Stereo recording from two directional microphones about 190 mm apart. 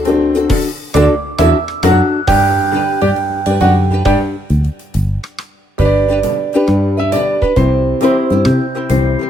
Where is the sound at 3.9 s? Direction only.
Centre (ahead or behind).